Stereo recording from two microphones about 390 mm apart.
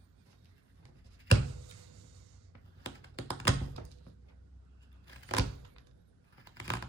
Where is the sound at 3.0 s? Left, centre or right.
Left.